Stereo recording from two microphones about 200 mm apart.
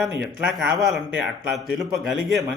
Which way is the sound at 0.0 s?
5° right (ahead or behind).